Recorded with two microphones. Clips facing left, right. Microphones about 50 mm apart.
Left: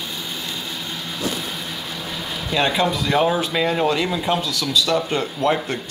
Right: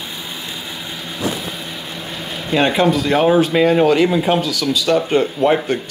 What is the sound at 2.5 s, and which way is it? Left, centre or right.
Speech, right.